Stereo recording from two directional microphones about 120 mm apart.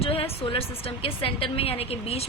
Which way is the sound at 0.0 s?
50° left (ahead or behind).